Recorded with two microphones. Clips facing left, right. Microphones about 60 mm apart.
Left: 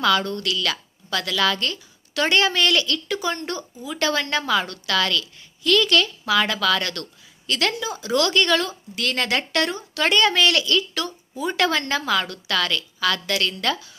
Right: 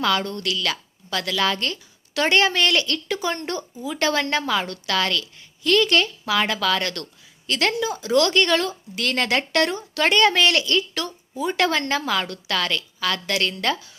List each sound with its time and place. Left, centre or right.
0.0 s a woman's voice: right